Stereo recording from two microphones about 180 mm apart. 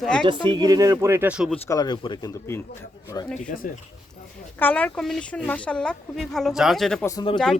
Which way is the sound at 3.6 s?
50° left (ahead or behind).